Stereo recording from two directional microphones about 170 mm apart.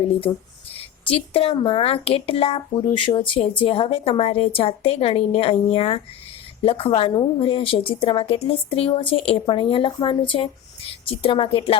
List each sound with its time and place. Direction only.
0.8 s a woman's voice: 35° left (ahead or behind)